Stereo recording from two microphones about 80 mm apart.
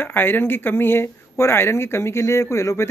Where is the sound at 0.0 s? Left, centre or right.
Left.